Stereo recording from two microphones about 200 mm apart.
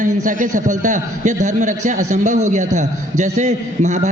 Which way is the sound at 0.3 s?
40° right (ahead or behind).